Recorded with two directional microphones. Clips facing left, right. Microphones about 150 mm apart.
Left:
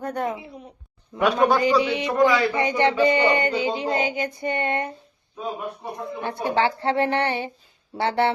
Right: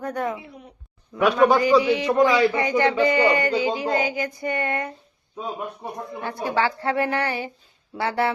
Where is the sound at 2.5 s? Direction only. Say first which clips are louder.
Even; 20° left (ahead or behind).